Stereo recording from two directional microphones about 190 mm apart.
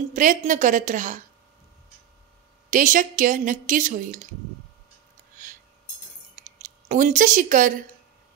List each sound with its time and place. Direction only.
0.1 s a woman's voice: 45° right (ahead or behind)
2.7 s a woman's voice: 45° right (ahead or behind)
6.4 s speech: 40° right (ahead or behind)